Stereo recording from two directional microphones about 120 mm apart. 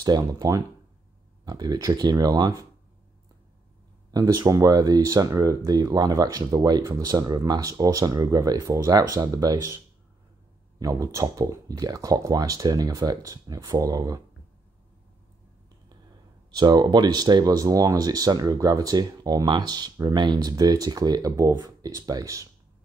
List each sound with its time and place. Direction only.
0.0 s speech: 35° right (ahead or behind)
4.1 s speech: 30° right (ahead or behind)
10.8 s speech: 30° right (ahead or behind)
16.5 s speech: 35° right (ahead or behind)